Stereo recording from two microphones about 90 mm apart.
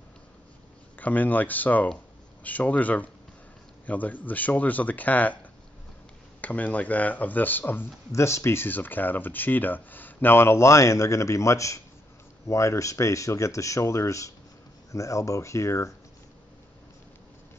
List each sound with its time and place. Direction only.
0.9 s speech: 20° left (ahead or behind)
6.4 s speech: 15° left (ahead or behind); by 15.9 s 35° left (ahead or behind)